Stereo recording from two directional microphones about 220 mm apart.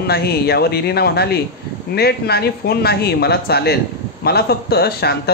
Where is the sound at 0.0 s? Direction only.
45° left (ahead or behind).